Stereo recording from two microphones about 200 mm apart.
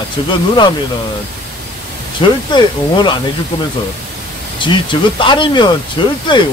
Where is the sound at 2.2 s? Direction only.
25° left (ahead or behind).